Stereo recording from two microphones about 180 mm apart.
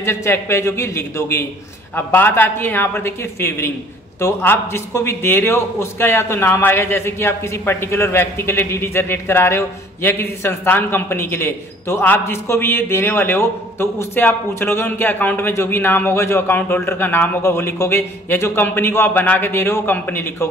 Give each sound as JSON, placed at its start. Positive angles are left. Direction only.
{"t": 0.0, "sound": "a man's voice", "side_deg": 15}